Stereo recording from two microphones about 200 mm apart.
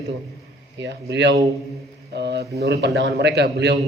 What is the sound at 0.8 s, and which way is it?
A man's voice, 60° right (ahead or behind).